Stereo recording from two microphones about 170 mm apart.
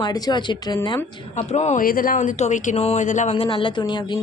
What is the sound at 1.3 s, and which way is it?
Speech, 40° left (ahead or behind).